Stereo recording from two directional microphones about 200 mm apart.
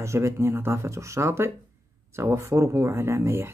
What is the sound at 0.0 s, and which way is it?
Speech, 15° right (ahead or behind).